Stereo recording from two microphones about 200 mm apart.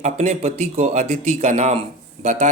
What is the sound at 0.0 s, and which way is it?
Speech, 30° right (ahead or behind).